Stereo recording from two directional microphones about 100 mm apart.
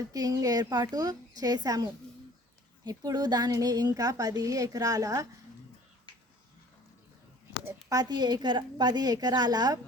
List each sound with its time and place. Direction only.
0.1 s a woman's voice: 35° right (ahead or behind)
7.9 s a woman's voice: 40° right (ahead or behind)